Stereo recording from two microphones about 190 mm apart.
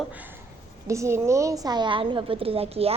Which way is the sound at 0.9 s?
15° right (ahead or behind).